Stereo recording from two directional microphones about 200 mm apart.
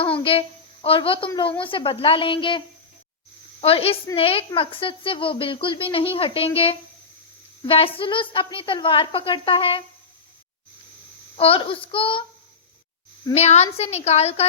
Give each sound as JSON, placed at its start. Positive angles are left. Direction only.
{"t": 0.0, "sound": "a woman's voice", "side_deg": 25}
{"t": 11.3, "sound": "a woman's voice", "side_deg": 30}
{"t": 13.3, "sound": "a woman's voice", "side_deg": 35}